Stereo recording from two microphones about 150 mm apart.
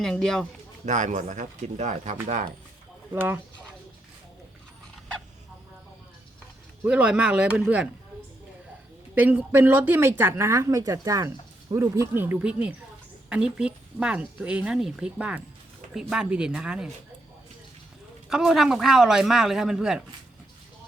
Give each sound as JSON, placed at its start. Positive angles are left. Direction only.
{"t": 0.0, "sound": "a woman's voice", "side_deg": 5}
{"t": 0.9, "sound": "speech", "side_deg": -55}
{"t": 3.1, "sound": "speech", "side_deg": -15}
{"t": 6.8, "sound": "speech", "side_deg": -10}
{"t": 9.1, "sound": "a woman's voice", "side_deg": -10}
{"t": 18.3, "sound": "a woman's voice", "side_deg": -5}